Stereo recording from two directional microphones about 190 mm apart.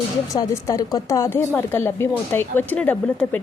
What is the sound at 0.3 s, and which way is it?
A woman's voice, 20° left (ahead or behind).